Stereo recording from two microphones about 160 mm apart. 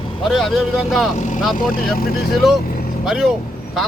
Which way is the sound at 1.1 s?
50° left (ahead or behind).